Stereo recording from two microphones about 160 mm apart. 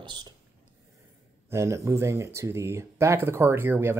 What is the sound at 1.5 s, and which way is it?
Speech, 15° right (ahead or behind).